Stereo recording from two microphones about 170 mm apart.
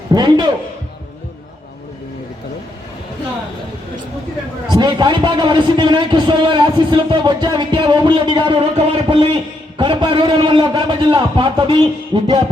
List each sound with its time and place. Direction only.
0.1 s a man's voice: 25° right (ahead or behind)
4.7 s a man's voice: 25° right (ahead or behind)